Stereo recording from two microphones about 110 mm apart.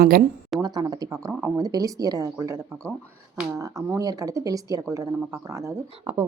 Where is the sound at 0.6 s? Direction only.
35° right (ahead or behind).